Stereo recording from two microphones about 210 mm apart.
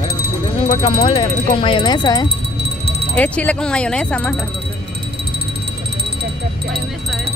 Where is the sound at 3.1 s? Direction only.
5° left (ahead or behind).